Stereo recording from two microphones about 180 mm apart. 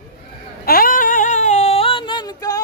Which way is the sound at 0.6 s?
55° left (ahead or behind).